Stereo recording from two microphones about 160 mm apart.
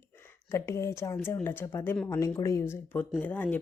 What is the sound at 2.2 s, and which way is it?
A woman's voice, 20° left (ahead or behind).